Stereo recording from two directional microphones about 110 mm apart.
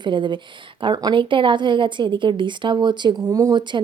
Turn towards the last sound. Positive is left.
turn(degrees=-45)  # may be behind; listen again after turning